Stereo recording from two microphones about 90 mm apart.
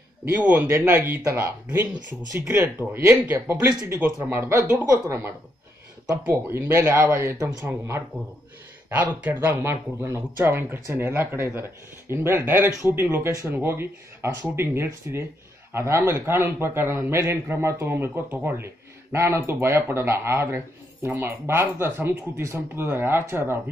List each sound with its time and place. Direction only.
0.8 s a man's voice: 25° right (ahead or behind)
2.9 s a man's voice: 25° right (ahead or behind)